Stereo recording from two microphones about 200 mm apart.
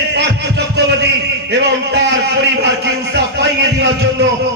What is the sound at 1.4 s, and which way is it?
A man's voice, 55° right (ahead or behind).